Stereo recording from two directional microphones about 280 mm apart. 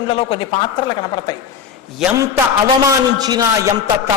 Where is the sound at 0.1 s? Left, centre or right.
Centre.